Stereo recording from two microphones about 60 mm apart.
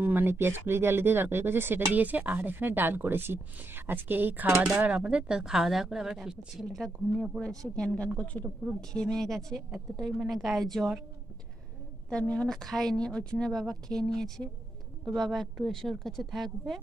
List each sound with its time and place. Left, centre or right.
0.0 s a woman's voice: right
2.0 s a woman's voice: right
4.8 s a woman's voice: right; by 6.9 s centre
7.3 s a woman's voice: centre
8.0 s a woman's voice: left
8.9 s a woman's voice: centre
12.1 s a woman's voice: centre